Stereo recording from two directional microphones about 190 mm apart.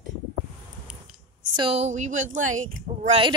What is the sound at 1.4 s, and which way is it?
A woman's voice, 25° right (ahead or behind).